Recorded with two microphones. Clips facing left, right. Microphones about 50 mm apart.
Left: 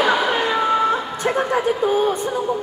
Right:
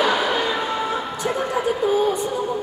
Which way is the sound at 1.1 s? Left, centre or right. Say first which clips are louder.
Left 3 dB; left.